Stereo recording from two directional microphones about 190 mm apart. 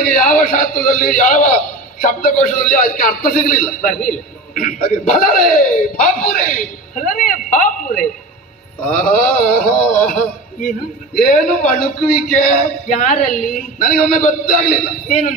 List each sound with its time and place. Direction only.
0.0 s a man's voice: 45° left (ahead or behind)